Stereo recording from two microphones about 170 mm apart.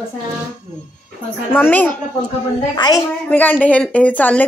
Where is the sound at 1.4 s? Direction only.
10° left (ahead or behind).